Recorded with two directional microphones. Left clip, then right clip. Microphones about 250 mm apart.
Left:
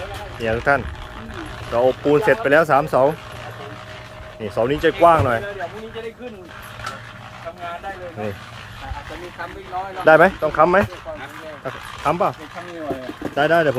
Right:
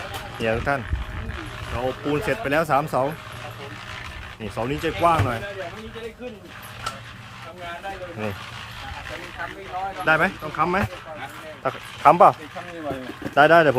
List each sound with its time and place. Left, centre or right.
0.4 s speech: centre
4.4 s speech: centre
10.1 s speech: left
11.6 s speech: centre
13.3 s speech: centre